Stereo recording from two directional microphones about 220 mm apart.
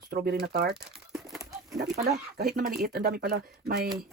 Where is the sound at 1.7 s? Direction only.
45° right (ahead or behind).